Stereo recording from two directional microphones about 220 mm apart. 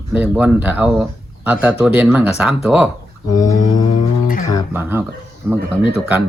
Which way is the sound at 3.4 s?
35° left (ahead or behind).